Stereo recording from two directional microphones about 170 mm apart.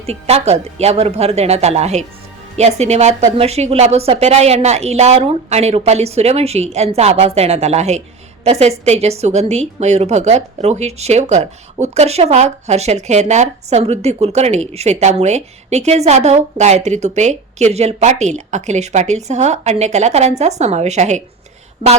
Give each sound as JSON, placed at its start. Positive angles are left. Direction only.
{"t": 0.0, "sound": "a woman's voice", "side_deg": -35}